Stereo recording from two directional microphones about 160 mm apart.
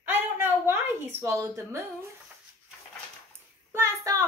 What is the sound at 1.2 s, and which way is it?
Speech, 15° right (ahead or behind).